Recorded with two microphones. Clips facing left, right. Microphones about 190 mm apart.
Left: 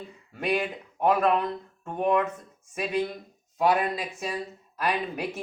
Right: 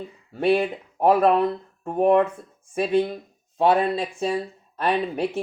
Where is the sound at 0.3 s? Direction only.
30° right (ahead or behind).